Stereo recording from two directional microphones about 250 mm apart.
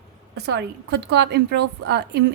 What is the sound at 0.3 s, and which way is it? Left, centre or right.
A woman's voice, right.